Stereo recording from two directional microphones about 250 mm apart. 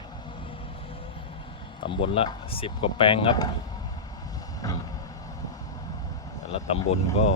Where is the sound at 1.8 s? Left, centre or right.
Left.